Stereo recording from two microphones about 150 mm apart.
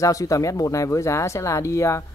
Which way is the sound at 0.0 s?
20° left (ahead or behind).